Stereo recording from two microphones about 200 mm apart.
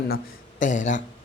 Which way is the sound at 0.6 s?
40° left (ahead or behind).